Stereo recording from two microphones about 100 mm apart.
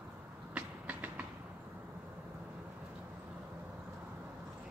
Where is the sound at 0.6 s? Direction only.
15° right (ahead or behind).